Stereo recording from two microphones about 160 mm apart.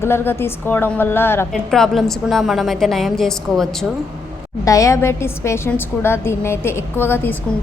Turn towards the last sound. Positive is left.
turn(degrees=15)  # may be behind; listen again after turning